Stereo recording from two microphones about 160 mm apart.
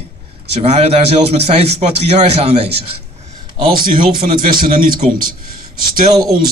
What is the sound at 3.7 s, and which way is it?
Speech, 65° right (ahead or behind).